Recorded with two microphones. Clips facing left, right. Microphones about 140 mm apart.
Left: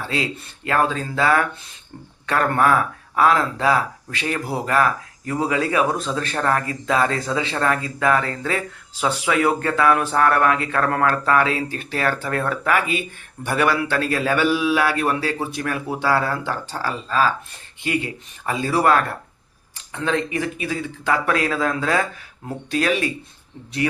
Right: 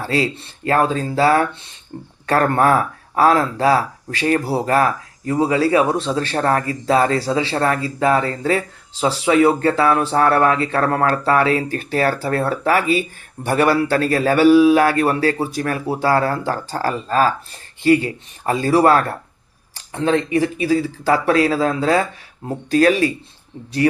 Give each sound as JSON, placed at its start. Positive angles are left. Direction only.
{"t": 0.1, "sound": "speech", "side_deg": -35}